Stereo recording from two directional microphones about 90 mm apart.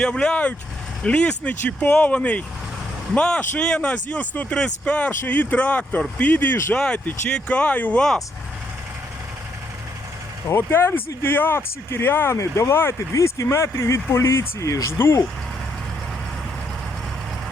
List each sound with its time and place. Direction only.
0.0 s speech: 10° left (ahead or behind)
10.5 s speech: 30° left (ahead or behind)